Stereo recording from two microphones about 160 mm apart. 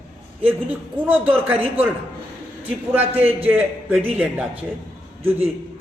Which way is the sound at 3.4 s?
10° right (ahead or behind).